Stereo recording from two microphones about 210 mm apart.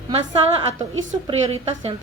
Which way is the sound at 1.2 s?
30° right (ahead or behind).